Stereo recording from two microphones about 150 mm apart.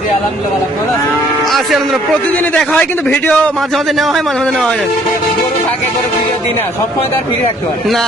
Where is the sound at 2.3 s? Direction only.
10° left (ahead or behind).